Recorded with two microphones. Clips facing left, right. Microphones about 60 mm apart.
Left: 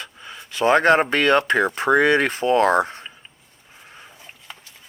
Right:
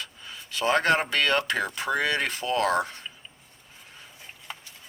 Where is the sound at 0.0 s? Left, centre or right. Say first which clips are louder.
Left 4 dB; left.